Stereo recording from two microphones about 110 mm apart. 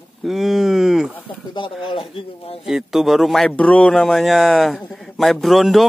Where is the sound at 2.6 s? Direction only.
5° right (ahead or behind).